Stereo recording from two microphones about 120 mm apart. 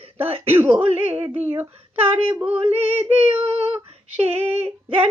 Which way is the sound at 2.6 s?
50° right (ahead or behind).